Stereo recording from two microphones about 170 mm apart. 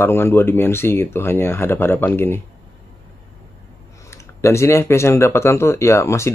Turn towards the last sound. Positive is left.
turn(degrees=15)  # may be behind; listen again after turning